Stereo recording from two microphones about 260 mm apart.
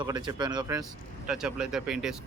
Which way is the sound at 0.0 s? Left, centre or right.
Centre.